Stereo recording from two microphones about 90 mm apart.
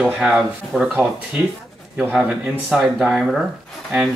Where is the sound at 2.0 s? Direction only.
10° right (ahead or behind).